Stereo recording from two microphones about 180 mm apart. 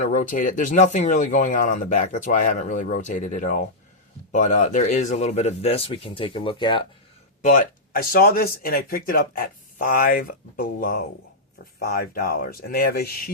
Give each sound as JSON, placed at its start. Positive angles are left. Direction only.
{"t": 0.0, "sound": "speech", "side_deg": 45}
{"t": 7.4, "sound": "speech", "side_deg": 50}